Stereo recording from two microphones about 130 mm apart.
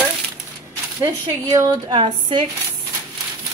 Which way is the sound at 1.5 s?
25° right (ahead or behind).